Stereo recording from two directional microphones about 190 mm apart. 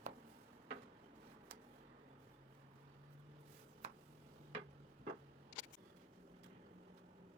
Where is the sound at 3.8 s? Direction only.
35° right (ahead or behind).